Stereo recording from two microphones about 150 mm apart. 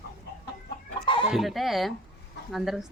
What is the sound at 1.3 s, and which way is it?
Speech, centre (ahead or behind).